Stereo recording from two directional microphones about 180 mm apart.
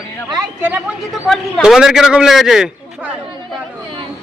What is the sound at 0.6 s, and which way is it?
Speech, 10° right (ahead or behind).